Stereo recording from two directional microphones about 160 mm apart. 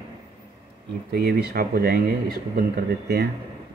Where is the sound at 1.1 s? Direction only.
80° right.